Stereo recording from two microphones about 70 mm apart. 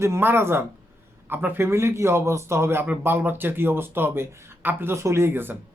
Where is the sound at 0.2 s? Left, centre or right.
Right.